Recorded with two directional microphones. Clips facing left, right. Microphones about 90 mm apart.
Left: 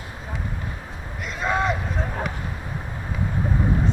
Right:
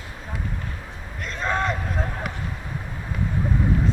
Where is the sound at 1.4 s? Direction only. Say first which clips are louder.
Left 2 dB; 5° left (ahead or behind).